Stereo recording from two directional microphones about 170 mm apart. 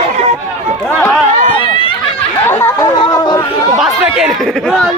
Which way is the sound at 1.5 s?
30° left (ahead or behind).